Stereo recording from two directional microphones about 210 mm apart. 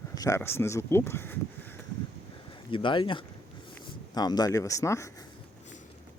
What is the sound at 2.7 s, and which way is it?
Speech, 25° left (ahead or behind).